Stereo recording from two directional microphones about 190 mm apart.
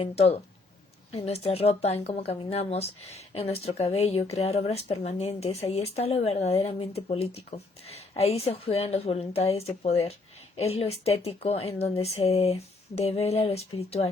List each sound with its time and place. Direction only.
0.0 s speech: 30° left (ahead or behind)